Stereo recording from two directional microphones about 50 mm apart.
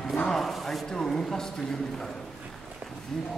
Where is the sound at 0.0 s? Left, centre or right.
Centre.